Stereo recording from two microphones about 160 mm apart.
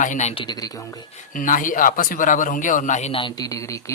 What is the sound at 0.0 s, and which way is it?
Speech, 50° left (ahead or behind).